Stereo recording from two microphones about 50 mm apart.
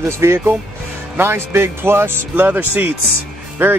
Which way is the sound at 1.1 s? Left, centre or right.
Right.